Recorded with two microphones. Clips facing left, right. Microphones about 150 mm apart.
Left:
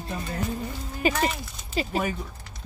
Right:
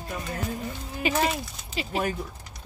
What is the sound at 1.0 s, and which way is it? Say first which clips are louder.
Speech: left 1 dB; 40° left (ahead or behind).